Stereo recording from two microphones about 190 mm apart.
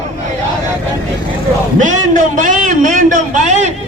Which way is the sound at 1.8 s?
40° right (ahead or behind).